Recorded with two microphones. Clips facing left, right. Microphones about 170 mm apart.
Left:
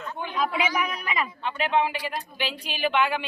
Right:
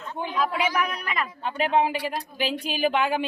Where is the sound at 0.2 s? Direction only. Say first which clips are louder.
Right 4 dB; 35° right (ahead or behind).